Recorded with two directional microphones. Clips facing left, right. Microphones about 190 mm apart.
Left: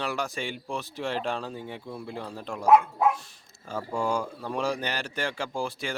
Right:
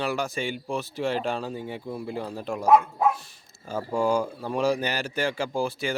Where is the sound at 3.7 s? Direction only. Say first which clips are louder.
Right 4 dB; 5° right (ahead or behind).